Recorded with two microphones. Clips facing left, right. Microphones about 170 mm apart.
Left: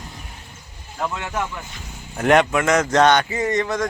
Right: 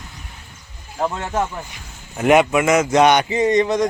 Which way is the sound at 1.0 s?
35° right (ahead or behind).